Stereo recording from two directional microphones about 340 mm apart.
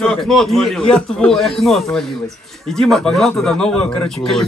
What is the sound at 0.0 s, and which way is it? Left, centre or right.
A man's voice, centre.